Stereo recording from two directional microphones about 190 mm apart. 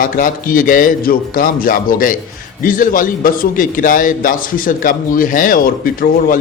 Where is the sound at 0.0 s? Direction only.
45° left (ahead or behind).